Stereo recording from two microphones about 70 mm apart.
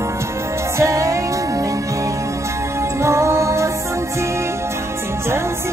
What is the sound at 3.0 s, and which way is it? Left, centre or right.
Music, right.